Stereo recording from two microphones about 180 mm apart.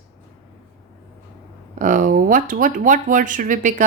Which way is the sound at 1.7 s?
50° right (ahead or behind).